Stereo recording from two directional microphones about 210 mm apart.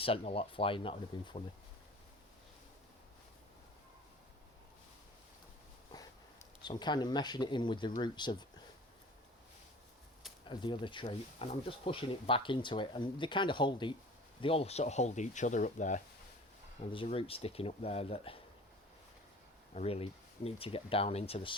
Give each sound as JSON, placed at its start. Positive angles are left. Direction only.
{"t": 0.0, "sound": "speech", "side_deg": 25}
{"t": 5.9, "sound": "a sound", "side_deg": 15}
{"t": 6.6, "sound": "speech", "side_deg": 20}
{"t": 10.5, "sound": "speech", "side_deg": 20}
{"t": 16.9, "sound": "speech", "side_deg": 25}
{"t": 19.7, "sound": "speech", "side_deg": 30}